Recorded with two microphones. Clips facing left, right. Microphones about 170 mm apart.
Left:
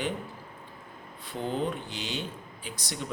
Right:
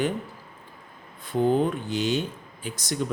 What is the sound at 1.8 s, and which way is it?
A man's voice, 45° right (ahead or behind).